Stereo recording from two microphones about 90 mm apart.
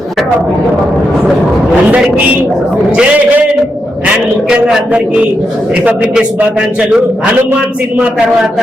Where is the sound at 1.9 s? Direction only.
15° right (ahead or behind).